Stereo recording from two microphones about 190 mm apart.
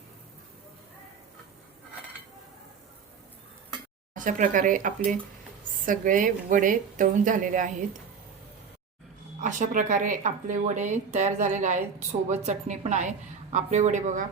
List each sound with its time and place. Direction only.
4.1 s a woman's voice: 45° right (ahead or behind)
9.4 s speech: 40° right (ahead or behind)